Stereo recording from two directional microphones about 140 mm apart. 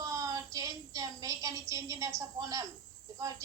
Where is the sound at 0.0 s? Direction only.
25° right (ahead or behind).